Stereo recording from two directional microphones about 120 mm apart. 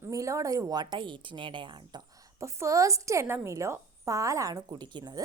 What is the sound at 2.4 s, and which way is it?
A woman's voice, 25° right (ahead or behind).